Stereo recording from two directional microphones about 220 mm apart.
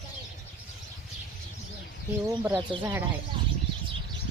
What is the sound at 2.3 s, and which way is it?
Speech, 15° right (ahead or behind).